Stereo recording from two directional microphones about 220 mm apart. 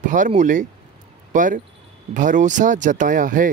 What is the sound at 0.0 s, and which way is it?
Speech, 35° right (ahead or behind).